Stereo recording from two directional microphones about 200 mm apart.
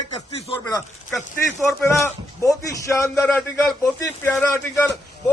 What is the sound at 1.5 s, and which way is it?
A man's voice, 15° left (ahead or behind).